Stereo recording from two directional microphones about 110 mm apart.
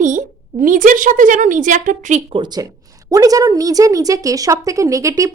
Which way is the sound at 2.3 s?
40° right (ahead or behind).